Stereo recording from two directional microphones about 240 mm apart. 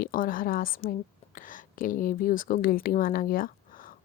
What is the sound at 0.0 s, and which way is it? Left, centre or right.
Speech, left.